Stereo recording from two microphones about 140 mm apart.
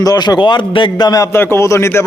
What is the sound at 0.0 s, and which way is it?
A man's voice, 30° left (ahead or behind).